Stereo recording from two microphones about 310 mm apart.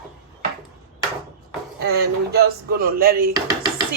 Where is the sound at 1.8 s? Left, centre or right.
Right.